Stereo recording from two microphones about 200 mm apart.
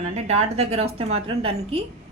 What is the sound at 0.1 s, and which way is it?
Speech, 35° right (ahead or behind).